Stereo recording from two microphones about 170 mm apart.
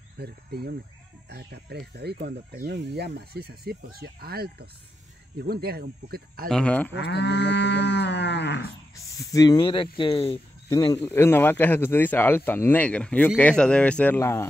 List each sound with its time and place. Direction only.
0.2 s speech: 70° right (ahead or behind)
6.5 s speech: 5° left (ahead or behind)
7.0 s livestock: 85° left
8.9 s speech: 20° left (ahead or behind)
10.7 s speech: 15° left (ahead or behind)